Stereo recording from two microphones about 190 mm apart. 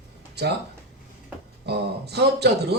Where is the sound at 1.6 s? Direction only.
60° right (ahead or behind).